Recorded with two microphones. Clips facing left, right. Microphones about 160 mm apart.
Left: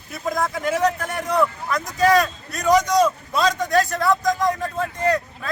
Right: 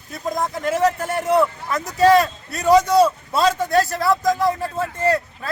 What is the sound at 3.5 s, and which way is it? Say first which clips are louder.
Speech: right 1 dB; centre (ahead or behind).